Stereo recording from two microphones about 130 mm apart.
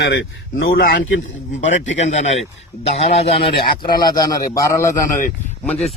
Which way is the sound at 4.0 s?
30° left (ahead or behind).